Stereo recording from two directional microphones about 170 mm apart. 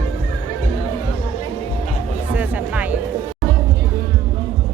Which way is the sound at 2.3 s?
10° right (ahead or behind).